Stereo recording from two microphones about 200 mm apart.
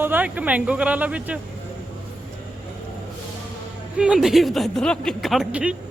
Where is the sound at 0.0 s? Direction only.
10° right (ahead or behind).